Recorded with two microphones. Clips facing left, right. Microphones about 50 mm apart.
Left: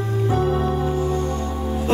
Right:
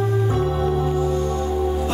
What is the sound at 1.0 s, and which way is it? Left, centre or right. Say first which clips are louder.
Music: right 1 dB; left.